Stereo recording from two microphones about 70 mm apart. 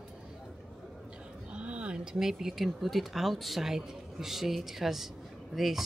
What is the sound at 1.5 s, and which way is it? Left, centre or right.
A woman's voice, centre.